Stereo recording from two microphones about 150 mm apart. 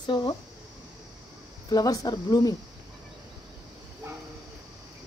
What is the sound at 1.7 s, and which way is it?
Speech, 25° left (ahead or behind).